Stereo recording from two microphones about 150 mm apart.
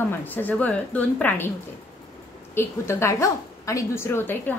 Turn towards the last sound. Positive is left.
turn(degrees=15)  # may be behind; listen again after turning